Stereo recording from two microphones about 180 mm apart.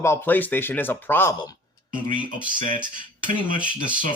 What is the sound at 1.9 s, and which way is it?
Speech, 45° right (ahead or behind).